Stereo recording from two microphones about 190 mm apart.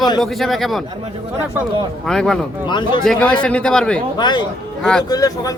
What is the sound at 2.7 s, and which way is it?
Speech, 25° left (ahead or behind).